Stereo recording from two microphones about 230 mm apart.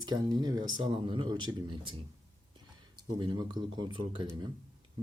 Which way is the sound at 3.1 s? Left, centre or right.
Centre.